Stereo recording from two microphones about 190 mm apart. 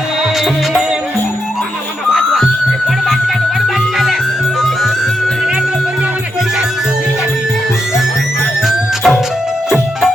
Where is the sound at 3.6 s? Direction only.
Centre (ahead or behind).